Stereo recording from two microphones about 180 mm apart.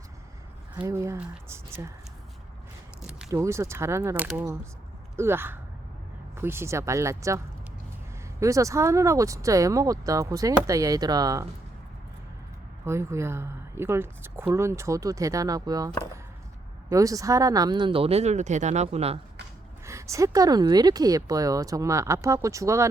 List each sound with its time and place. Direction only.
0.9 s speech: 15° right (ahead or behind)
3.0 s single-lens reflex camera: 5° right (ahead or behind)
3.2 s speech: 15° right (ahead or behind)
12.8 s speech: 15° right (ahead or behind)
16.9 s speech: 20° right (ahead or behind); by 19.2 s 35° right (ahead or behind)
19.8 s speech: 15° right (ahead or behind)